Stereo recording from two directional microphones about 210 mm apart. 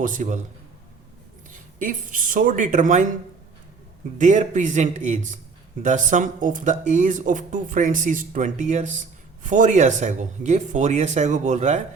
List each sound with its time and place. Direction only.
0.0 s speech: 35° right (ahead or behind)
1.5 s speech: 40° right (ahead or behind)
4.2 s speech: 35° right (ahead or behind)